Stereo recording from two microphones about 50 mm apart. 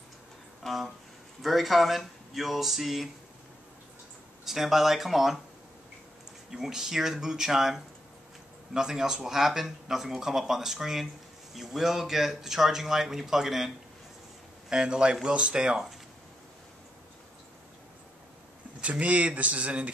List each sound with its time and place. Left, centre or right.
0.7 s speech: centre
4.5 s speech: centre
6.5 s speech: centre
14.7 s speech: centre
18.8 s speech: right